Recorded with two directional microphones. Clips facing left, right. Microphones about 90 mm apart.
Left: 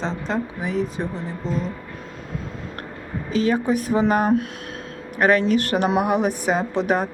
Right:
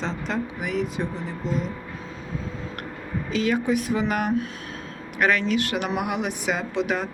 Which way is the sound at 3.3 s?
35° left (ahead or behind).